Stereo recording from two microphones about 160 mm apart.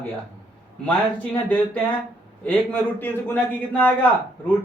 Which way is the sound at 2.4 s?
10° left (ahead or behind).